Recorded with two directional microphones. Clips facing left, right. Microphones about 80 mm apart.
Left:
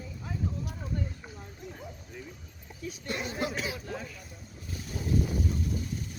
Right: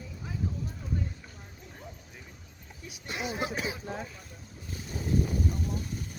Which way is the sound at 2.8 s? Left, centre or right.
Centre.